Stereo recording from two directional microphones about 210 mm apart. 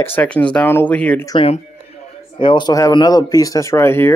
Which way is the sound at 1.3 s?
25° left (ahead or behind).